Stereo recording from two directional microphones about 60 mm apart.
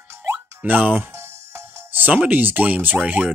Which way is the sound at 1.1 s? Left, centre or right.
Right.